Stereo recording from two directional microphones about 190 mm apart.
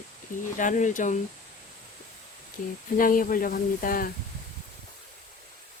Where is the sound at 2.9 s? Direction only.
45° left (ahead or behind).